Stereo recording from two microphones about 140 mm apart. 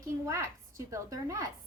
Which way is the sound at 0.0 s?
20° right (ahead or behind).